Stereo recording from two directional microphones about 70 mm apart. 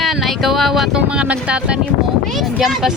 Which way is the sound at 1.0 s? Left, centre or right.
Centre.